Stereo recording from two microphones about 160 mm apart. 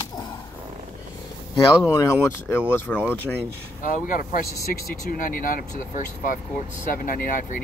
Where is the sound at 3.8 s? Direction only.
55° left (ahead or behind).